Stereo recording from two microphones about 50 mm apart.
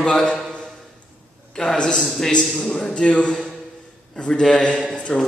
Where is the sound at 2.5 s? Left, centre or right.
Centre.